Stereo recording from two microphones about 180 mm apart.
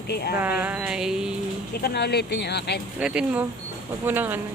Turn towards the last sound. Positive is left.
turn(degrees=-10)  # may be behind; listen again after turning